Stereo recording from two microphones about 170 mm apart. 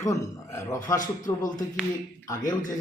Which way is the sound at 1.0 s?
50° left (ahead or behind).